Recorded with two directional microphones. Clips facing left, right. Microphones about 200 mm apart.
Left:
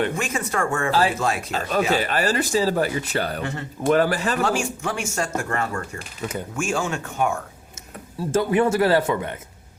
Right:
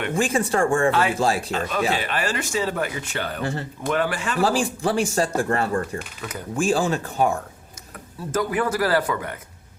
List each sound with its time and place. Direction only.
0.2 s speech: 30° right (ahead or behind)
0.9 s a man's voice: 30° left (ahead or behind)
1.1 s speech: 30° right (ahead or behind)
1.9 s a man's voice: 40° left (ahead or behind)
3.4 s speech: 35° right (ahead or behind)
3.8 s a man's voice: 40° left (ahead or behind)
4.4 s speech: 35° right (ahead or behind)
6.0 s a man's voice: 30° left (ahead or behind)
6.6 s speech: 35° right (ahead or behind)
8.3 s a man's voice: 25° left (ahead or behind)